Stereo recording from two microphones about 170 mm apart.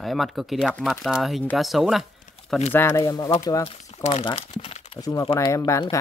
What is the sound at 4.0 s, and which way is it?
Speech, 40° left (ahead or behind).